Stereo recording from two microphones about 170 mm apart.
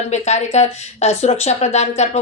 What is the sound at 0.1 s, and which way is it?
Speech, 40° left (ahead or behind).